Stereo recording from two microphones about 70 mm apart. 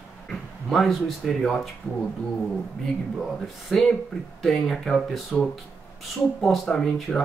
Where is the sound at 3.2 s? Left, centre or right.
Centre.